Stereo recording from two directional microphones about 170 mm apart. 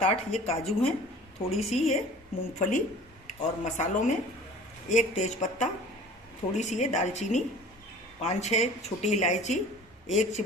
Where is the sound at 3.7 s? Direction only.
45° left (ahead or behind).